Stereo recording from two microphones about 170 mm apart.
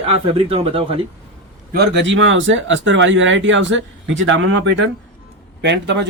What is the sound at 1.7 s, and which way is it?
Speech, 80° right.